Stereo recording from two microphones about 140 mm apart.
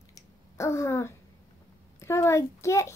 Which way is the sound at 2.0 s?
20° left (ahead or behind).